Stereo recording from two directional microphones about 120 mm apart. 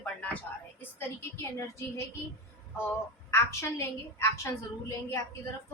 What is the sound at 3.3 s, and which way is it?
Speech, 25° left (ahead or behind).